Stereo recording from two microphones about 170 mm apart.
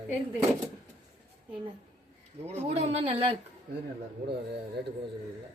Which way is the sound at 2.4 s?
40° right (ahead or behind).